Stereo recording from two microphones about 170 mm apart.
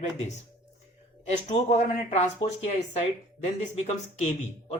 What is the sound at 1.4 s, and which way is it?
Speech, 40° left (ahead or behind).